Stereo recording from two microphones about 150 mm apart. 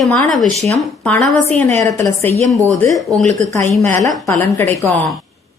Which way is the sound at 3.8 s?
15° left (ahead or behind).